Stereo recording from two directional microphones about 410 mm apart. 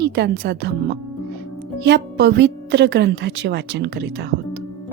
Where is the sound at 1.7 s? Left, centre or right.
Right.